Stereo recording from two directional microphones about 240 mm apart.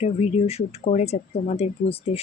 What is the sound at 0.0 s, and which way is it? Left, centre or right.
Speech, left.